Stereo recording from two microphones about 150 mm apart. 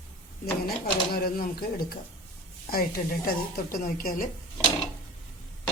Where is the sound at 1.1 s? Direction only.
90° left; by 4.3 s 70° left (ahead or behind).